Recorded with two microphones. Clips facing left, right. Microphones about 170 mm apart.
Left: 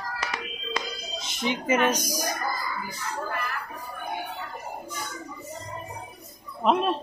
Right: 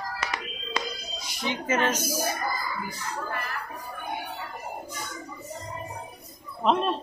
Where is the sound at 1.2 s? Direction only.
20° left (ahead or behind).